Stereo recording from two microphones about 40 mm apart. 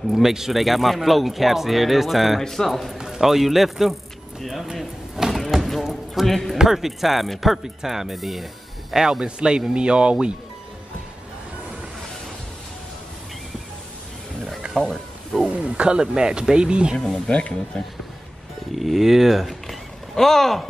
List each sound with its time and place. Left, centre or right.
0.1 s speech: centre
2.4 s speech: centre
3.0 s speech: centre
4.7 s vehicle: centre
5.8 s a sound: centre
6.2 s speech: centre
6.6 s speech: centre; by 10.1 s right
14.8 s speech: centre
15.5 s speech: right
17.3 s speech: left
18.8 s speech: centre
19.4 s a sound: centre